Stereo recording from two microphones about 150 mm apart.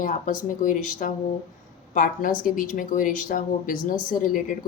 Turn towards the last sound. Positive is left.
turn(degrees=65)  # may be behind; listen again after turning